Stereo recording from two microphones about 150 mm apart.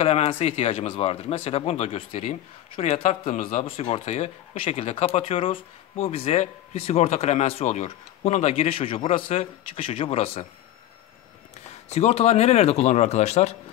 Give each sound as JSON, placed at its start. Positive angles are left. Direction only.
{"t": 0.0, "sound": "speech", "side_deg": 40}
{"t": 3.6, "sound": "speech", "side_deg": 40}
{"t": 11.9, "sound": "speech", "side_deg": 45}